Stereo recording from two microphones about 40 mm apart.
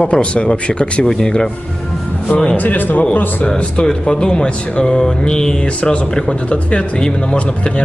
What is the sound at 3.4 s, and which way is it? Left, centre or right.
Speech, centre.